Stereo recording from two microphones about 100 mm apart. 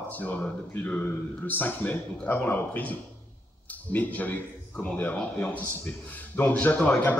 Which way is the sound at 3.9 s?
15° left (ahead or behind).